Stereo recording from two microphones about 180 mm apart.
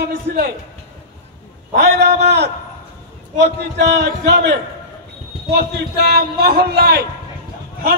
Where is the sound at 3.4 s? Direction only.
70° right (ahead or behind).